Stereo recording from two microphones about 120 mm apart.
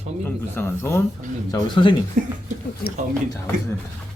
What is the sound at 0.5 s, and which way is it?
Speech, 20° left (ahead or behind).